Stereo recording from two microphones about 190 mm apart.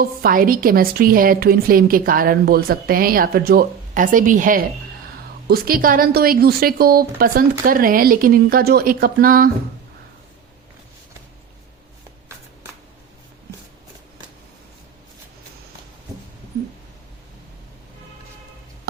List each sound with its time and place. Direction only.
0.0 s a woman's voice: 50° right (ahead or behind)